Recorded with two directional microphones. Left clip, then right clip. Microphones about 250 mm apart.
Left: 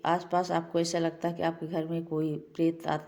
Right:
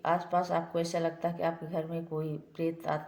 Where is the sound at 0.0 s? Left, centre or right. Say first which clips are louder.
Left 1 dB; left.